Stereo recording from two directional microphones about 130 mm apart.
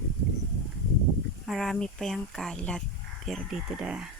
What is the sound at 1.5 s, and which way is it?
Speech, centre (ahead or behind).